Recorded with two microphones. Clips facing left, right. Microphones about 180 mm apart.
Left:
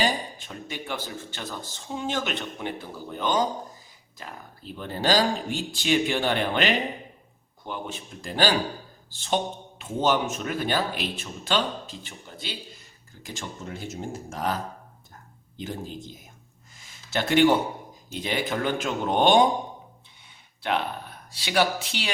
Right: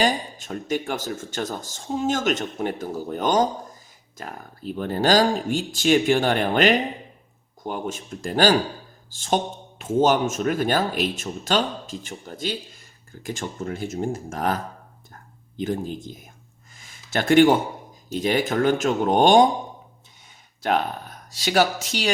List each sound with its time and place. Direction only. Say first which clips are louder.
0.0 s speech: right 4 dB; 45° right (ahead or behind)
16.7 s a sound: right 3 dB; 50° right (ahead or behind)
18.1 s speech: right 6 dB; 45° right (ahead or behind)
20.6 s speech: right 4 dB; 45° right (ahead or behind)